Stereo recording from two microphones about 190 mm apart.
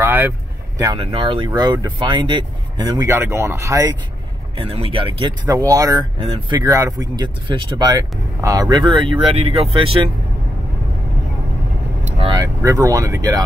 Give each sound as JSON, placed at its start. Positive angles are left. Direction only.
{"t": 0.0, "sound": "vehicle", "side_deg": -10}
{"t": 0.9, "sound": "speech", "side_deg": -30}
{"t": 6.2, "sound": "speech", "side_deg": -30}
{"t": 6.6, "sound": "speech", "side_deg": -15}
{"t": 12.2, "sound": "speech", "side_deg": -20}